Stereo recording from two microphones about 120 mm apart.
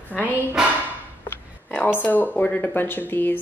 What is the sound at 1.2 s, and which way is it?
Speech, 15° left (ahead or behind).